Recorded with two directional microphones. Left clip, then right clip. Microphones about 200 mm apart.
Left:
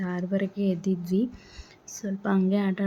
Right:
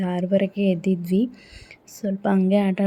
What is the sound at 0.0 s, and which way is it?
A woman's voice, 15° right (ahead or behind).